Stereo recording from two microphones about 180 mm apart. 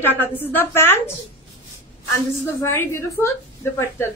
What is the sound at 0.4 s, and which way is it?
Speech, 10° left (ahead or behind).